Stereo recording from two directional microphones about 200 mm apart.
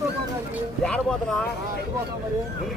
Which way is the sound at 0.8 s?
5° left (ahead or behind).